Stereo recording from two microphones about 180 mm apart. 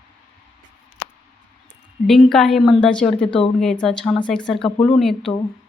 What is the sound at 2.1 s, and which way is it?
A woman's voice, centre (ahead or behind).